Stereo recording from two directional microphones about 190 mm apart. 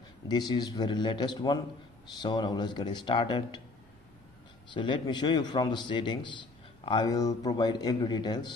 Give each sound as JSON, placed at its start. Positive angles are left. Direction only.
{"t": 0.3, "sound": "a man's voice", "side_deg": 20}
{"t": 4.7, "sound": "a man's voice", "side_deg": 25}